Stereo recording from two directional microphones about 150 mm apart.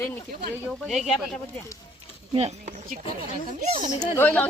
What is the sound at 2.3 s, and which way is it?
Speech, 45° right (ahead or behind).